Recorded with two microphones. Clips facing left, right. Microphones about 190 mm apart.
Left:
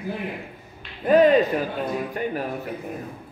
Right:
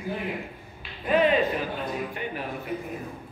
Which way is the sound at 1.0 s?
40° left (ahead or behind).